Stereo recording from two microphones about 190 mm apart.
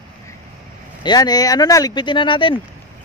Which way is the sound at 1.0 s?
20° left (ahead or behind).